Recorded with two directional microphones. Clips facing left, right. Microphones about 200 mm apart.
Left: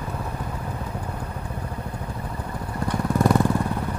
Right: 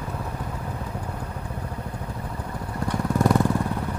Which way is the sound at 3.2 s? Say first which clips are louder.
Left 1 dB; 25° left (ahead or behind).